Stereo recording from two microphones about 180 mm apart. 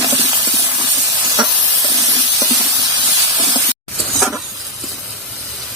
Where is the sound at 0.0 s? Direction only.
20° right (ahead or behind).